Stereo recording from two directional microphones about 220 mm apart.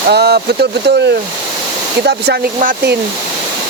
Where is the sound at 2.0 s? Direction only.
45° right (ahead or behind).